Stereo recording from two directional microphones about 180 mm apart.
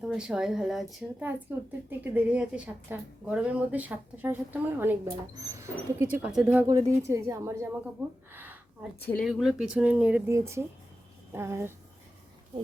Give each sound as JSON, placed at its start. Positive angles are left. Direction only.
{"t": 0.0, "sound": "a woman's voice", "side_deg": -5}
{"t": 6.7, "sound": "a woman's voice", "side_deg": -20}
{"t": 8.3, "sound": "a sound", "side_deg": -10}
{"t": 9.0, "sound": "a woman's voice", "side_deg": 10}
{"t": 9.2, "sound": "a woman's voice", "side_deg": -5}